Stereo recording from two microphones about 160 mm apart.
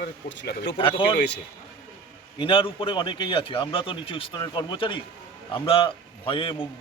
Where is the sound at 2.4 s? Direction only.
30° left (ahead or behind).